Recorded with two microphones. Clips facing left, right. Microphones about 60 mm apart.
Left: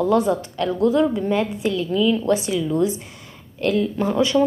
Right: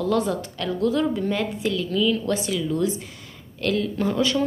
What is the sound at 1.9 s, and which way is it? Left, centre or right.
A woman's voice, centre.